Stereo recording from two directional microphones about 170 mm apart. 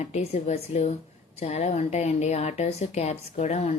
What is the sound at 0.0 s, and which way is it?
Speech, 40° left (ahead or behind).